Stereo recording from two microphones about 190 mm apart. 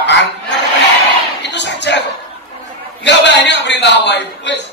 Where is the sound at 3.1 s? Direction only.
65° left (ahead or behind).